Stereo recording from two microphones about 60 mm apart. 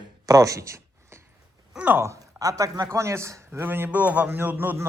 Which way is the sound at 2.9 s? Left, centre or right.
Right.